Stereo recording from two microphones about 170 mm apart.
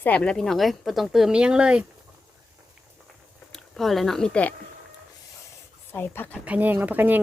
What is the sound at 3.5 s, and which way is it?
Speech, centre (ahead or behind).